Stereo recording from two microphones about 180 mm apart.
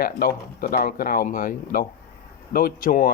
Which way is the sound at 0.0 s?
55° left (ahead or behind).